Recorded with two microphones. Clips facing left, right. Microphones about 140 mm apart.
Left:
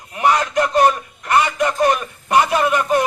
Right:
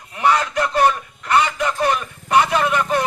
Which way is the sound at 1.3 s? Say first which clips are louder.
Left 1 dB; 35° left (ahead or behind).